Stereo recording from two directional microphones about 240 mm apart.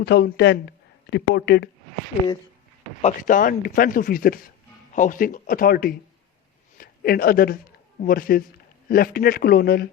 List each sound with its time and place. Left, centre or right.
0.0 s a woman's voice: left
3.0 s a man's voice: left